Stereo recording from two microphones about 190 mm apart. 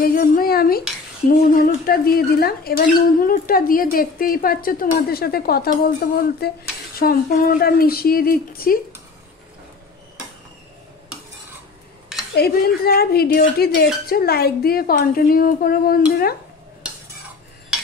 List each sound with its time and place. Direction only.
0.0 s speech: 50° left (ahead or behind)
12.1 s a sound: 5° right (ahead or behind)
12.4 s speech: 55° left (ahead or behind)